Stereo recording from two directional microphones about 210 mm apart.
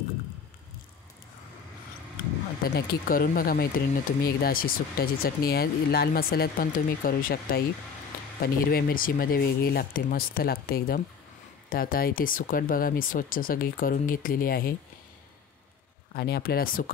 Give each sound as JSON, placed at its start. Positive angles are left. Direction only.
{"t": 2.7, "sound": "speech", "side_deg": 40}
{"t": 16.1, "sound": "speech", "side_deg": 45}